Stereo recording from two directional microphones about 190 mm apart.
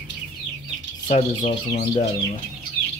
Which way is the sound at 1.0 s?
40° left (ahead or behind).